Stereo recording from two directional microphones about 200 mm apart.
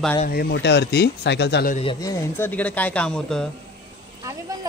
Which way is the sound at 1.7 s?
30° left (ahead or behind).